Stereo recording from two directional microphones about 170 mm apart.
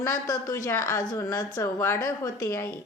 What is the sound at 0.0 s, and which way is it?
Speech, 15° left (ahead or behind).